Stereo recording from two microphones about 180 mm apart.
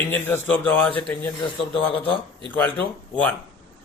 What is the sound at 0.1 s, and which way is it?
Speech, 10° left (ahead or behind).